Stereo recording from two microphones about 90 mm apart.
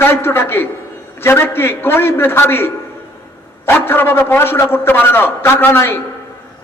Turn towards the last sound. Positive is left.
turn(degrees=25)  # may be behind; listen again after turning